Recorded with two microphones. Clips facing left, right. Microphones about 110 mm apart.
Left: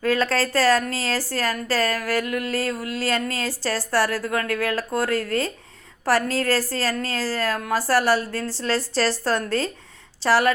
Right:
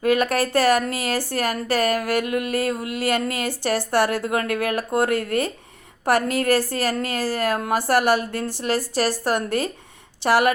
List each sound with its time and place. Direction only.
0.0 s a woman's voice: 15° right (ahead or behind)